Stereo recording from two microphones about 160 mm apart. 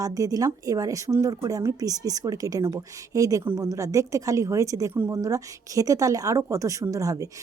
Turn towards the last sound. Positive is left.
turn(degrees=-20)  # may be behind; listen again after turning